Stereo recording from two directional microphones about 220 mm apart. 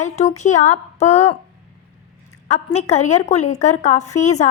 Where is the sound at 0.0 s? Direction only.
30° left (ahead or behind).